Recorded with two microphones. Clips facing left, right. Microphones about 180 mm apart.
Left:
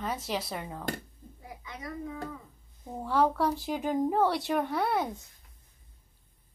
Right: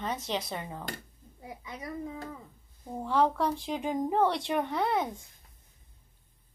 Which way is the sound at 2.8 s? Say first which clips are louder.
Even; 5° left (ahead or behind).